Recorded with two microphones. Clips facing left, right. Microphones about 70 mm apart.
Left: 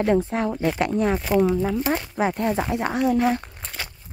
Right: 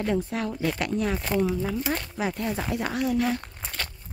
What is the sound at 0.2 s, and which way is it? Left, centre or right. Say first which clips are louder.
A woman's voice: left 5 dB; left.